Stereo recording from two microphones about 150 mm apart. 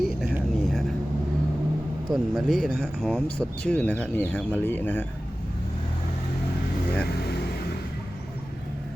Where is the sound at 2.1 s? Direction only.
Centre (ahead or behind).